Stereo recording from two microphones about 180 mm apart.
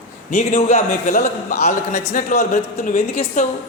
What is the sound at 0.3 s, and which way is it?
A man's voice, 40° left (ahead or behind).